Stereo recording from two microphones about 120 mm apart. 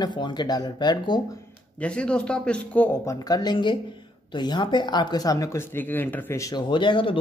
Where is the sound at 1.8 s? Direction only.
10° left (ahead or behind).